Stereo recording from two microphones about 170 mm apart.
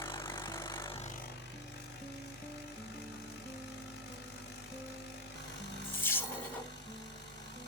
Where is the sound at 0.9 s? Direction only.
45° left (ahead or behind).